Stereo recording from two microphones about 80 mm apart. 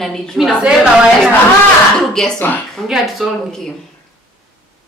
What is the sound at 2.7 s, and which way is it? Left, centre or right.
A woman's voice, centre.